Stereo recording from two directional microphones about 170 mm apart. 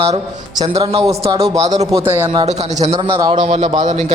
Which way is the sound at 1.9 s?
15° right (ahead or behind).